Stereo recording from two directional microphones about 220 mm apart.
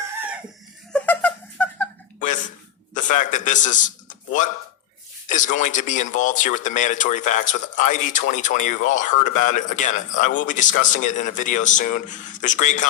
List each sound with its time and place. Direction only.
0.9 s a sound: 5° left (ahead or behind)
2.1 s gasp: 35° left (ahead or behind)
2.9 s a man's voice: 35° left (ahead or behind)